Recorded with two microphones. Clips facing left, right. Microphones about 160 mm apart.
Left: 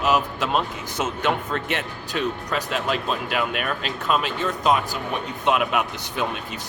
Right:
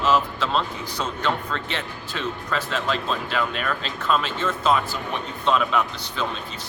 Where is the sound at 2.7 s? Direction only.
10° left (ahead or behind).